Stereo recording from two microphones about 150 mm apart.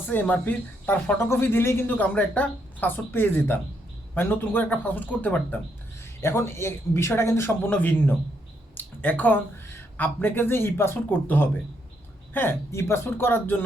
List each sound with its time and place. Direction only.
0.0 s speech: 15° left (ahead or behind)